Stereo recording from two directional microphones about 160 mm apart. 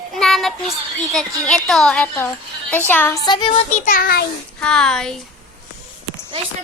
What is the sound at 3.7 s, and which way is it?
Speech, 55° left (ahead or behind).